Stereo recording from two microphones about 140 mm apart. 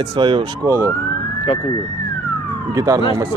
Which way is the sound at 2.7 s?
25° right (ahead or behind).